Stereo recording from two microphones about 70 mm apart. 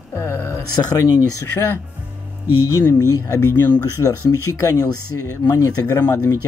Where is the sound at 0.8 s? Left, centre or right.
Left.